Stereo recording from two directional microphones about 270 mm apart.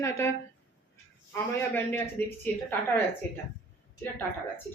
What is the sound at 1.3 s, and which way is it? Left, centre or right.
A woman's voice, centre.